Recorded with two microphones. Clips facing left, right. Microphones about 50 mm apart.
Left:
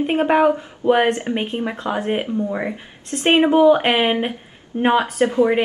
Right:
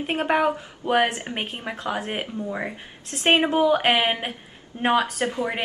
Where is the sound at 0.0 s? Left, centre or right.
Centre.